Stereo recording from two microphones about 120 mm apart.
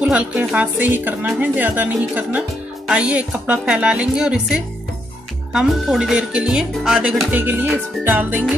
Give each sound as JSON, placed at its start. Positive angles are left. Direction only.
{"t": 0.0, "sound": "speech", "side_deg": -10}